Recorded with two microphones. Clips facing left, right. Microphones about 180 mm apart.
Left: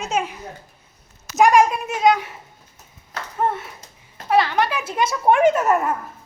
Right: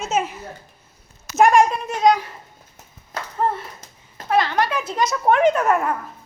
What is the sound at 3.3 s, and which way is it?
A woman's voice, 5° left (ahead or behind).